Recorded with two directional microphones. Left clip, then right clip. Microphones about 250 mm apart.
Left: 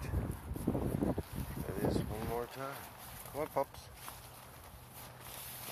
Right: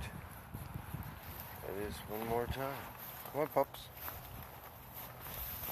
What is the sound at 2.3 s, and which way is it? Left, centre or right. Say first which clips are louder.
Speech: right 3 dB; centre.